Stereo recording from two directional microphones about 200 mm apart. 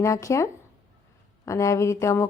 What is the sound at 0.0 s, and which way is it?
Speech, 15° left (ahead or behind).